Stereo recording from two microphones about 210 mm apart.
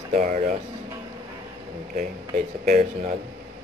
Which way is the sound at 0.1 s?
35° right (ahead or behind).